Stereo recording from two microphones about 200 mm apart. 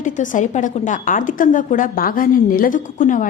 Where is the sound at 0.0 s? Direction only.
40° left (ahead or behind).